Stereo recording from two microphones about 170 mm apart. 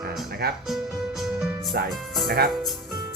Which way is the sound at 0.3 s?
65° right (ahead or behind).